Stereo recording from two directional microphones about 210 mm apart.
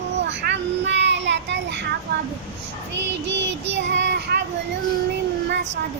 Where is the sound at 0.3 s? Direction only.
55° right (ahead or behind).